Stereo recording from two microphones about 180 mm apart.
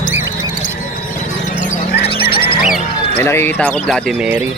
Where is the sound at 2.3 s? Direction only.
60° left (ahead or behind).